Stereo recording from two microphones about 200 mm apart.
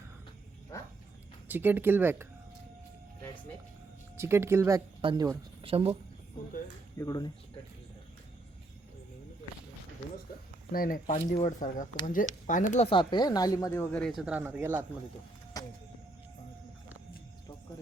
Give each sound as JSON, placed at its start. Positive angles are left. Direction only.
{"t": 1.5, "sound": "speech", "side_deg": -10}
{"t": 4.2, "sound": "speech", "side_deg": -10}
{"t": 5.7, "sound": "speech", "side_deg": -30}
{"t": 7.0, "sound": "speech", "side_deg": 20}
{"t": 10.7, "sound": "speech", "side_deg": 45}